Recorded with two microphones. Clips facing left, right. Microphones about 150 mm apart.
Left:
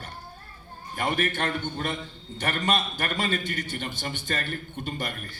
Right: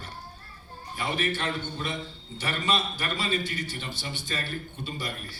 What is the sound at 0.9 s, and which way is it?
A man's voice, 55° left (ahead or behind).